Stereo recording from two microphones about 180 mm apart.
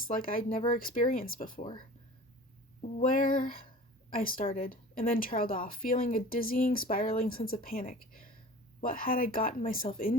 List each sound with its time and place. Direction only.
0.1 s a woman's voice: 50° left (ahead or behind)
3.0 s a woman's voice: 50° left (ahead or behind)